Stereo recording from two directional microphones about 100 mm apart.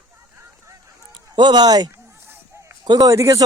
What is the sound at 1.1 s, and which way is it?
Speech, 50° right (ahead or behind).